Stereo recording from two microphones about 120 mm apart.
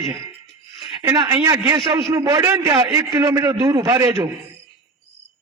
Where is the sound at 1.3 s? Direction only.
30° right (ahead or behind).